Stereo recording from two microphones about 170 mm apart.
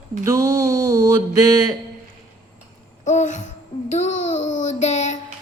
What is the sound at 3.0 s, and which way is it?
A child's voice, 45° left (ahead or behind).